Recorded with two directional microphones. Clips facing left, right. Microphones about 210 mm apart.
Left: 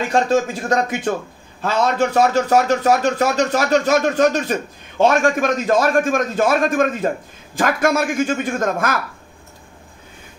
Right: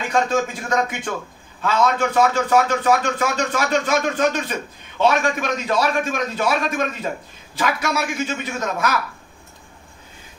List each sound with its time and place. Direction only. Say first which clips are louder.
0.1 s a man's voice: left 2 dB; 40° left (ahead or behind)